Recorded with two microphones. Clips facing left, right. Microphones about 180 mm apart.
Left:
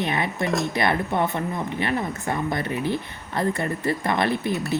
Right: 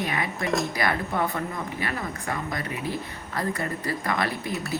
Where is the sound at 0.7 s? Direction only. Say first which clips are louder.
Left 4 dB; 25° left (ahead or behind).